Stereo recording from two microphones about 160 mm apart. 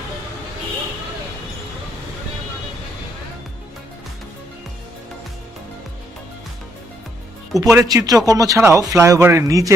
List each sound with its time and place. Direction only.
7.6 s speech: 20° right (ahead or behind)